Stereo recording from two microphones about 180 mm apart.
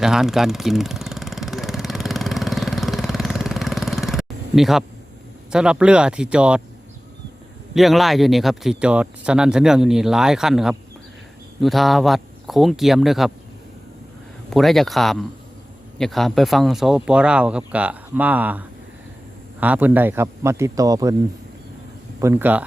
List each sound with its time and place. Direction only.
0.0 s vehicle: 5° right (ahead or behind)
5.5 s speech: 5° right (ahead or behind)
7.7 s speech: centre (ahead or behind)
14.5 s a man's voice: centre (ahead or behind); by 21.2 s 20° right (ahead or behind)
22.2 s a man's voice: 10° right (ahead or behind)